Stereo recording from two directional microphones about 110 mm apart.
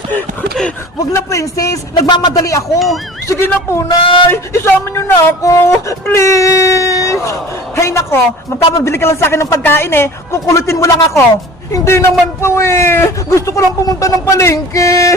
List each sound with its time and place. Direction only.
1.1 s a man's voice: 30° left (ahead or behind)
2.7 s speech: centre (ahead or behind)
3.2 s a man's voice: 25° left (ahead or behind)
3.8 s speech: 50° left (ahead or behind)
4.3 s a man's voice: 25° left (ahead or behind)